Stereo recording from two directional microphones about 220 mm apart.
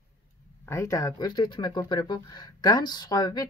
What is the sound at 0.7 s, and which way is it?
Speech, 15° left (ahead or behind).